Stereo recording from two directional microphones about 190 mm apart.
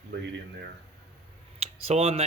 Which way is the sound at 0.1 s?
65° right (ahead or behind).